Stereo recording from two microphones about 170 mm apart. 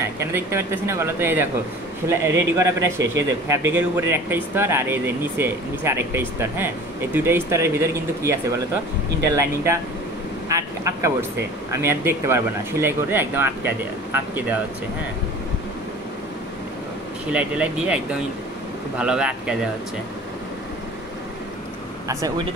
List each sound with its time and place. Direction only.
0.2 s speech: 15° right (ahead or behind)
17.3 s speech: 5° right (ahead or behind)